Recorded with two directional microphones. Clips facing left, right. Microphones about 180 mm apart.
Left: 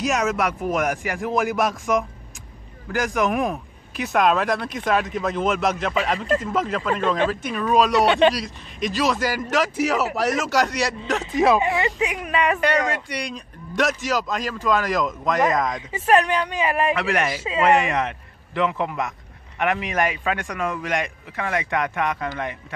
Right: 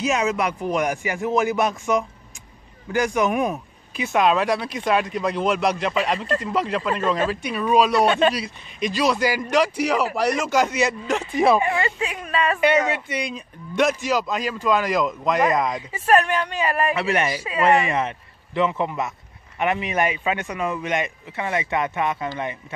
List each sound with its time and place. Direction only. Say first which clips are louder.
0.0 s a man's voice: even; centre (ahead or behind)
7.9 s speech: left 1 dB; 20° left (ahead or behind)
8.7 s a man's voice: right 1 dB; centre (ahead or behind)
11.6 s speech: left 1 dB; 20° left (ahead or behind)
12.5 s a man's voice: right 2 dB; 5° right (ahead or behind)
15.9 s speech: left 1 dB; 15° left (ahead or behind)
16.9 s a man's voice: even; centre (ahead or behind)
17.4 s speech: left 1 dB; 25° left (ahead or behind)
17.6 s a man's voice: even; centre (ahead or behind)